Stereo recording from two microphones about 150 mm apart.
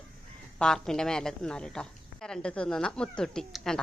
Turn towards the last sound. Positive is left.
turn(degrees=0)  # may be behind; listen again after turning